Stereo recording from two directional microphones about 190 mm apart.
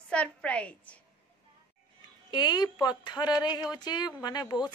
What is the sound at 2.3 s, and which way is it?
A woman's voice, 20° left (ahead or behind).